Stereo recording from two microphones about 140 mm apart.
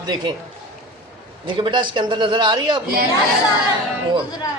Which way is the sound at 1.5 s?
35° right (ahead or behind).